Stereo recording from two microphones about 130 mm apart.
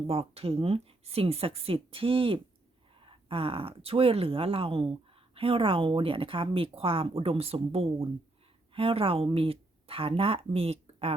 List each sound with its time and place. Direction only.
0.1 s speech: 45° right (ahead or behind)